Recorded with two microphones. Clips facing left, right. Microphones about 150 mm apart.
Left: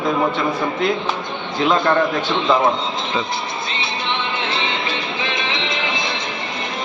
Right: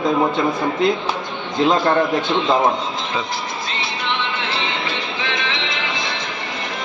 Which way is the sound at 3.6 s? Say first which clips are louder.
Even; 20° left (ahead or behind).